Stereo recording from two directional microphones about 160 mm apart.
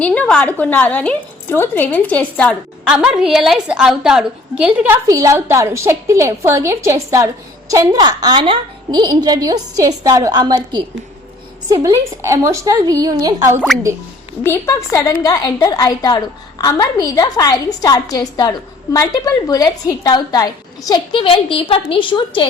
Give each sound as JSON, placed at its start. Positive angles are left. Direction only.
{"t": 0.0, "sound": "a woman's voice", "side_deg": 5}
{"t": 2.9, "sound": "a woman's voice", "side_deg": -5}
{"t": 5.0, "sound": "a woman's voice", "side_deg": -20}
{"t": 13.7, "sound": "a woman's voice", "side_deg": 0}
{"t": 14.4, "sound": "a woman's voice", "side_deg": 15}